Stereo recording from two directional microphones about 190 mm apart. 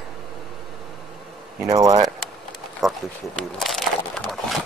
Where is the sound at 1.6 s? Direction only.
15° right (ahead or behind).